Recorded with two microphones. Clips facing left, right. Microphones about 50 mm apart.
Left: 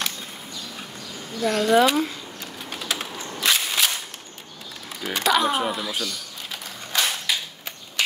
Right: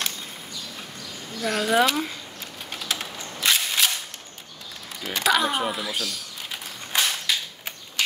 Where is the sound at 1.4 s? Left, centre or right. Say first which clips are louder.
Left 3 dB; centre.